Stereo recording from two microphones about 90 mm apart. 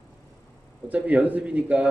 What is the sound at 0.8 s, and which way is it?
A man's voice, 15° right (ahead or behind).